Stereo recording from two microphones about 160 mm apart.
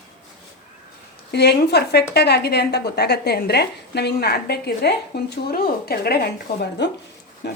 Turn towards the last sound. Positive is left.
turn(degrees=90)